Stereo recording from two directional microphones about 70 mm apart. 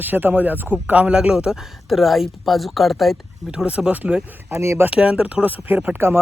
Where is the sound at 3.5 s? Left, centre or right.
Centre.